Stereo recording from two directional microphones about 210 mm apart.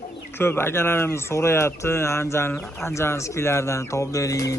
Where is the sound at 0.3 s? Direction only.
10° left (ahead or behind).